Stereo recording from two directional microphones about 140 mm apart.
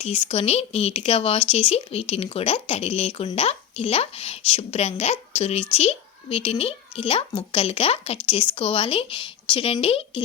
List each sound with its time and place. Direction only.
0.0 s a woman's voice: 45° left (ahead or behind)